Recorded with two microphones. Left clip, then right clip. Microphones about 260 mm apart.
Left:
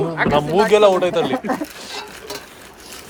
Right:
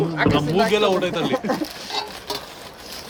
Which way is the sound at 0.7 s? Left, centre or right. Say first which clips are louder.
Left 6 dB; centre.